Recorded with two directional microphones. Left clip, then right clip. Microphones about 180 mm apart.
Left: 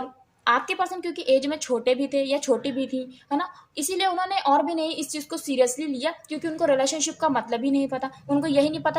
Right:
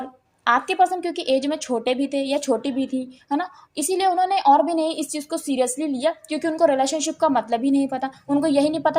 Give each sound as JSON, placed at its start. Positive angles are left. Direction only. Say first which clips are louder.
{"t": 0.4, "sound": "a woman's voice", "louder": "right 5 dB", "side_deg": -25}